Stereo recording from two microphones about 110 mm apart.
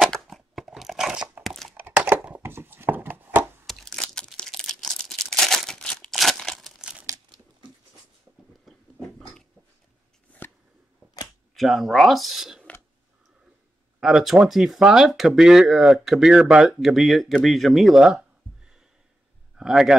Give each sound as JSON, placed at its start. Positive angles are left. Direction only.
{"t": 0.0, "sound": "tearing", "side_deg": 0}
{"t": 1.9, "sound": "chopping", "side_deg": -15}
{"t": 3.6, "sound": "crumpling", "side_deg": 5}
{"t": 6.8, "sound": "crumpling", "side_deg": -10}
{"t": 8.3, "sound": "a sound", "side_deg": -20}
{"t": 10.4, "sound": "a sound", "side_deg": 20}
{"t": 11.5, "sound": "speech", "side_deg": 0}
{"t": 13.9, "sound": "speech", "side_deg": -5}
{"t": 19.5, "sound": "a man's voice", "side_deg": -5}